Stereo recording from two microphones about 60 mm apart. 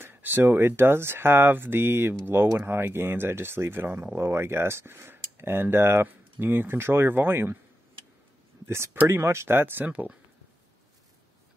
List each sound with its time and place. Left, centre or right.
0.0 s speech: right
8.6 s speech: right
9.8 s speech: right